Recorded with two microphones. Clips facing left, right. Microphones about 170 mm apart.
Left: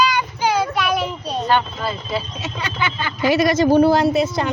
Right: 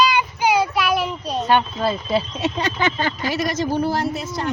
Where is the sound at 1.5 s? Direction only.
25° right (ahead or behind); by 3.1 s 40° right (ahead or behind).